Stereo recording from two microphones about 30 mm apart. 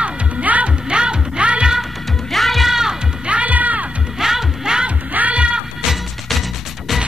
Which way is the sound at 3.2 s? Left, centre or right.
Right.